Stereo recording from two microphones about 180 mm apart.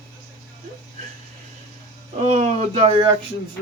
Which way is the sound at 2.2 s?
40° right (ahead or behind).